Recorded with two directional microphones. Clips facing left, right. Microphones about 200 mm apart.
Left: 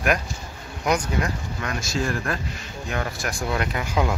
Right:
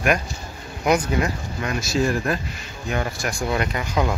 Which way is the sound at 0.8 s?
5° right (ahead or behind).